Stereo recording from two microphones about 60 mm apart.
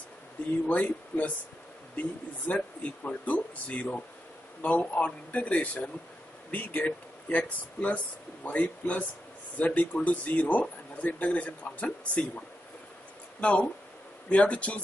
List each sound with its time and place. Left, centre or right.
0.7 s speech: left